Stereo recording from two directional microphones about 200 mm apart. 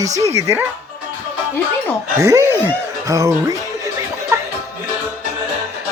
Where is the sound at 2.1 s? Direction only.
15° right (ahead or behind).